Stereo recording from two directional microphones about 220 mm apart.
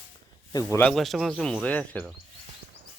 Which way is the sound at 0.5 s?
15° left (ahead or behind).